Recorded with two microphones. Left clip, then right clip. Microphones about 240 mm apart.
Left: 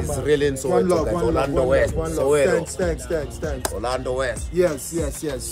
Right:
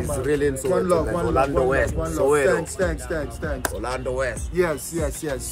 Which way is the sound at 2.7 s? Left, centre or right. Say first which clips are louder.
Left 1 dB; centre.